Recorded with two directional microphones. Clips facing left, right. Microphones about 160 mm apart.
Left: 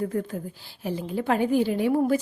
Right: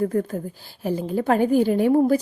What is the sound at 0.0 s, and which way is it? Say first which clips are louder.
A woman's voice: right 5 dB; 45° right (ahead or behind).